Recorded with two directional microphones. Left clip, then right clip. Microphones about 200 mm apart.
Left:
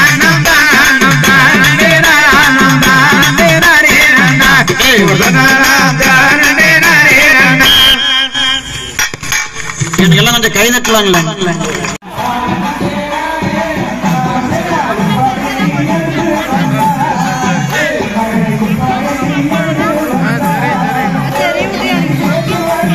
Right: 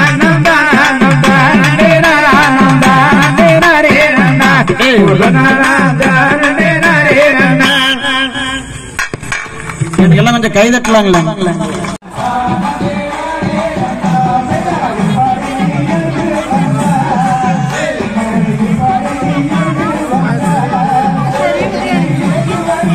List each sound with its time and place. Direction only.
0.0 s music: 35° right (ahead or behind)
9.9 s a sound: 40° right (ahead or behind)
10.5 s a man's voice: 40° right (ahead or behind)
10.9 s a man's voice: 60° right (ahead or behind)